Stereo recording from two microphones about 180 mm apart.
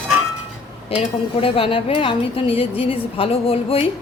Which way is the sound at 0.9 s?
30° left (ahead or behind).